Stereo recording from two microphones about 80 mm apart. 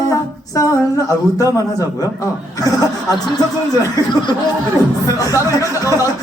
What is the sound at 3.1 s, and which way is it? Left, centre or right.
Speech, left.